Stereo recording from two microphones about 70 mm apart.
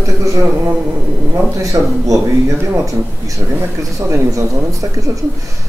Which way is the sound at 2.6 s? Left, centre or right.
Right.